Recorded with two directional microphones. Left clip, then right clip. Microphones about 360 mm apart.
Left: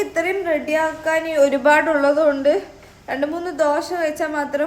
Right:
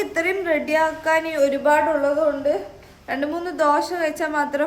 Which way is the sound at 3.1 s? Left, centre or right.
Centre.